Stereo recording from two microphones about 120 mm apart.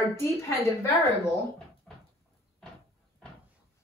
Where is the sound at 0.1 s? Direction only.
20° left (ahead or behind).